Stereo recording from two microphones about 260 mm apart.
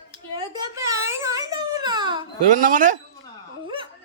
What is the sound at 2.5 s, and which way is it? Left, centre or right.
Speech, right.